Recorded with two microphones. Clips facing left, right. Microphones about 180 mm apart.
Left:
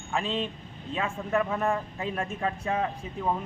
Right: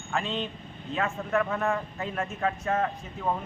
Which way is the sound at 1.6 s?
30° left (ahead or behind).